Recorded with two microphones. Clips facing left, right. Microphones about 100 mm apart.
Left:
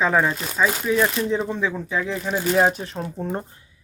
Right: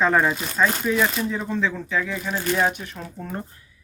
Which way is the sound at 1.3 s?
20° left (ahead or behind).